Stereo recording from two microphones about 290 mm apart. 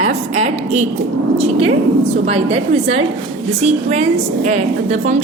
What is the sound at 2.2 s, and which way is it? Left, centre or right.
A woman's voice, right.